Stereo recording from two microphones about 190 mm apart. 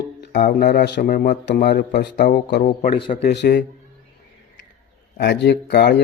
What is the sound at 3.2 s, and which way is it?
Speech, 60° left (ahead or behind).